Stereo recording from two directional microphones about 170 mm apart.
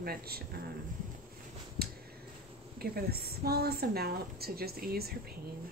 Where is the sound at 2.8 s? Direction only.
65° right (ahead or behind).